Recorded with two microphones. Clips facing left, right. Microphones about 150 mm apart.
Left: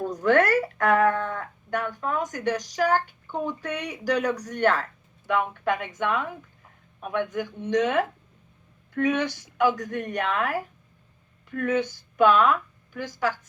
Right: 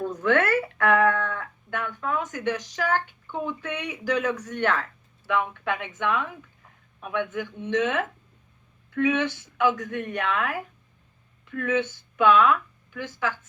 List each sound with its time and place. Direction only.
0.0 s speech: 35° left (ahead or behind)